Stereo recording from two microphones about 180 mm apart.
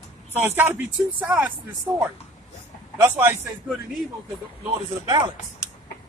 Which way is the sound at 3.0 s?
15° right (ahead or behind).